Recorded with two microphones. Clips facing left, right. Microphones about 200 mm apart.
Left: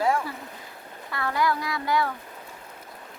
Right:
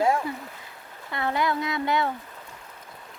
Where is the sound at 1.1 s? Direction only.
20° right (ahead or behind).